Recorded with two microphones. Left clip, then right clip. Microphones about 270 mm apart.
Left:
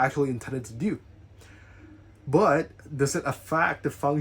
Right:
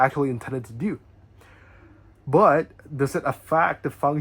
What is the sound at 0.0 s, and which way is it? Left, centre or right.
Speech, centre.